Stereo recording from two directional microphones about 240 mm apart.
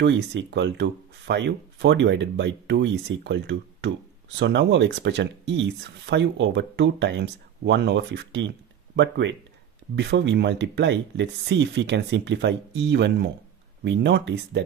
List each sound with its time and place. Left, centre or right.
0.0 s speech: right